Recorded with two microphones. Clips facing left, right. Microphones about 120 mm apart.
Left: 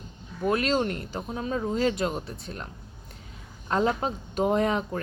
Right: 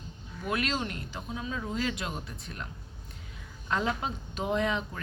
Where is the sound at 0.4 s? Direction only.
35° left (ahead or behind).